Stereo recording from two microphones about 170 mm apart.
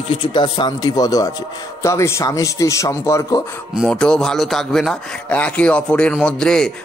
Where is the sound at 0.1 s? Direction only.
25° left (ahead or behind).